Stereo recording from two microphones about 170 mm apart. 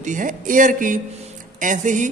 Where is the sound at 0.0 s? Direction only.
50° right (ahead or behind).